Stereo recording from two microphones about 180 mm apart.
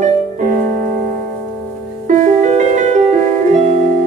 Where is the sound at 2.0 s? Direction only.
45° right (ahead or behind).